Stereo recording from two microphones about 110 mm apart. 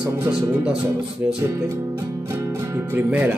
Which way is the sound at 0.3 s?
10° right (ahead or behind).